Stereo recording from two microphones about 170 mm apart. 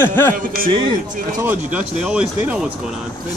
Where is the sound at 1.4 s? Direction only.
10° right (ahead or behind).